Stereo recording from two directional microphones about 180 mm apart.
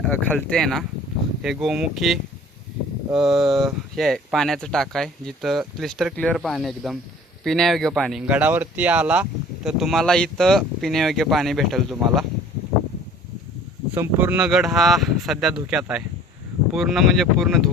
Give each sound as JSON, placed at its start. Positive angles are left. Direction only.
{"t": 0.0, "sound": "speech", "side_deg": 10}
{"t": 13.9, "sound": "speech", "side_deg": -10}